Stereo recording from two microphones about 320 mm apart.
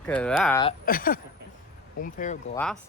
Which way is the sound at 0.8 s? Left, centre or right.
Left.